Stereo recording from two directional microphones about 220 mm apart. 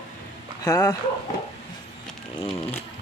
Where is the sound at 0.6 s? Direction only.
15° left (ahead or behind).